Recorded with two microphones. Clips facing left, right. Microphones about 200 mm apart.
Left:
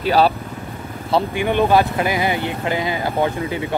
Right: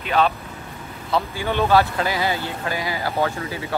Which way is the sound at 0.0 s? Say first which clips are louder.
Left 4 dB; 35° left (ahead or behind).